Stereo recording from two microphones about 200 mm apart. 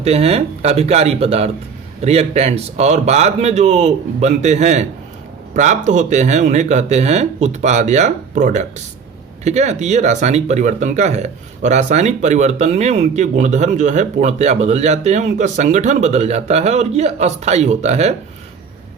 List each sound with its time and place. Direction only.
0.0 s speech: 30° right (ahead or behind)